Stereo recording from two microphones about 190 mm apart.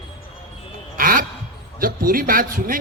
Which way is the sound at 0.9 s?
45° right (ahead or behind).